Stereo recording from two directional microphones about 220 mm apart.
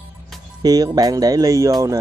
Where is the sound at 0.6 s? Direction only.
15° right (ahead or behind).